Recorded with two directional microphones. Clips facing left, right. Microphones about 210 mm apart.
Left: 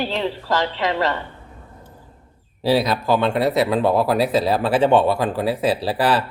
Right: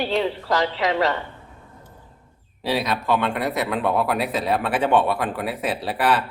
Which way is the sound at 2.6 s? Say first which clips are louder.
Left 5 dB; 35° left (ahead or behind).